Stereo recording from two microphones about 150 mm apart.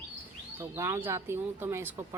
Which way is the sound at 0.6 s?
20° right (ahead or behind).